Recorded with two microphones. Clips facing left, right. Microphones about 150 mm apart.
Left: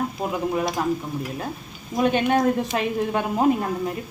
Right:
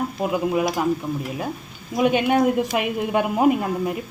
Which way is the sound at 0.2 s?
10° right (ahead or behind).